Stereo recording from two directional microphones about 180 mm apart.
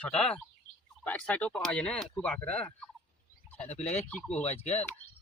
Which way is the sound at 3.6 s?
35° left (ahead or behind).